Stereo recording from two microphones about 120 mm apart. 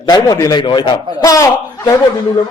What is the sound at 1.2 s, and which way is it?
Speech, 25° left (ahead or behind).